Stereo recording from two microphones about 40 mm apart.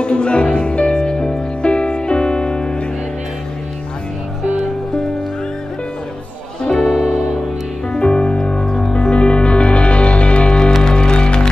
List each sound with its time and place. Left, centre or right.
0.0 s music: left
6.6 s music: left
7.9 s music: left
8.9 s music: left